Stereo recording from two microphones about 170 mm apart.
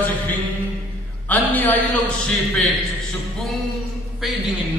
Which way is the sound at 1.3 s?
10° left (ahead or behind).